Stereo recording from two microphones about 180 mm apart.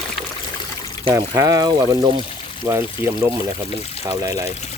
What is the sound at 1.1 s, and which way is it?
Speech, 15° right (ahead or behind).